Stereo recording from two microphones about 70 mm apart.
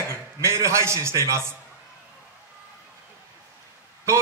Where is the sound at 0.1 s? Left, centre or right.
Right.